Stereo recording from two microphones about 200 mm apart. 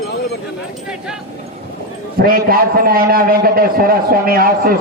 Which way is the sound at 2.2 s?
45° right (ahead or behind).